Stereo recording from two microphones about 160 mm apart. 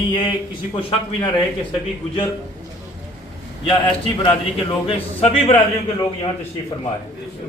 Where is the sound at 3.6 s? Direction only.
30° left (ahead or behind).